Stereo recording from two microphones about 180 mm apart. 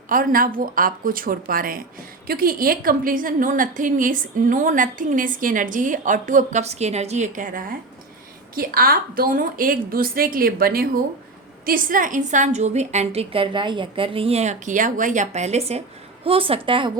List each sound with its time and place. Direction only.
0.1 s a woman's voice: 50° right (ahead or behind); by 16.9 s 30° right (ahead or behind)